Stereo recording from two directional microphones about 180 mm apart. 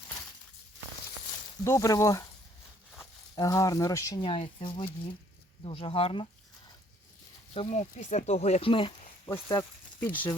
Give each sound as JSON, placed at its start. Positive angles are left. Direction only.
{"t": 1.6, "sound": "speech", "side_deg": 15}
{"t": 3.3, "sound": "speech", "side_deg": 20}
{"t": 4.2, "sound": "speech", "side_deg": 30}
{"t": 7.5, "sound": "speech", "side_deg": 35}
{"t": 9.3, "sound": "speech", "side_deg": 15}